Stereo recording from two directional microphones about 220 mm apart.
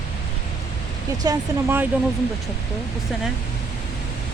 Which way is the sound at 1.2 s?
10° right (ahead or behind).